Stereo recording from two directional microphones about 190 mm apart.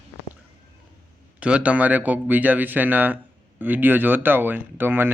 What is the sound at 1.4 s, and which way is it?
A man's voice, 5° right (ahead or behind).